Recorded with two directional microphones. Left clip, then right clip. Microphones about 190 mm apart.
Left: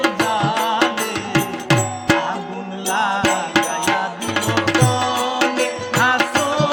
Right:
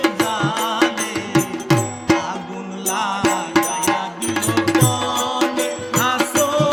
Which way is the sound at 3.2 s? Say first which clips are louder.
Even; 25° left (ahead or behind).